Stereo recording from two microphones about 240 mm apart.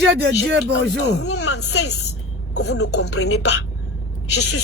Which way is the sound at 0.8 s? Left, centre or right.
Left.